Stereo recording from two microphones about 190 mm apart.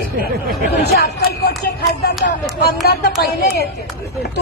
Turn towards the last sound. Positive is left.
turn(degrees=55)  # may be behind; listen again after turning